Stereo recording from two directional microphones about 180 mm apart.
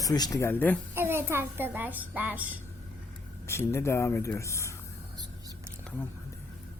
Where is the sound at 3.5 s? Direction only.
15° left (ahead or behind).